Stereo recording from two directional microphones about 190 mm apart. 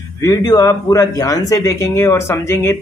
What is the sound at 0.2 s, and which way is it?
Speech, 20° left (ahead or behind).